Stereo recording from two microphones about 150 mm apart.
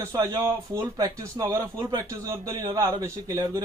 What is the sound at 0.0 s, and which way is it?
Speech, 20° right (ahead or behind).